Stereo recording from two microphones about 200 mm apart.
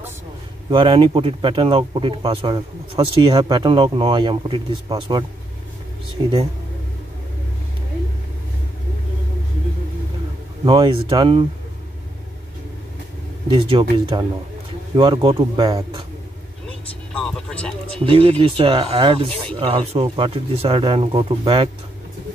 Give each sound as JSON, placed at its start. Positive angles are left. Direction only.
{"t": 0.7, "sound": "speech", "side_deg": -25}
{"t": 10.6, "sound": "speech", "side_deg": -25}
{"t": 13.5, "sound": "speech", "side_deg": -25}
{"t": 17.2, "sound": "music", "side_deg": 5}
{"t": 17.9, "sound": "speech", "side_deg": -25}